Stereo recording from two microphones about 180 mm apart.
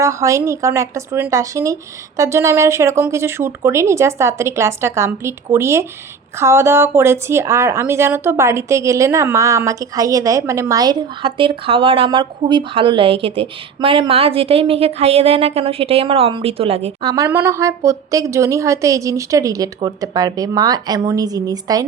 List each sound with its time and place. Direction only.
0.0 s a woman's voice: 15° right (ahead or behind); by 16.9 s 35° right (ahead or behind)
17.0 s a woman's voice: 20° right (ahead or behind)